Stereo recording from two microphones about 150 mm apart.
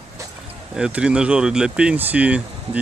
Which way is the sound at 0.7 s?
5° right (ahead or behind).